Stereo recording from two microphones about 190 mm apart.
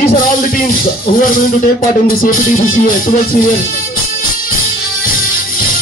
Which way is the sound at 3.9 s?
50° left (ahead or behind).